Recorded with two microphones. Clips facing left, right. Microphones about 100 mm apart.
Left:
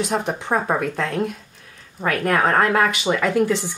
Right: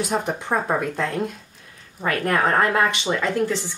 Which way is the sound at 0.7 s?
Centre (ahead or behind).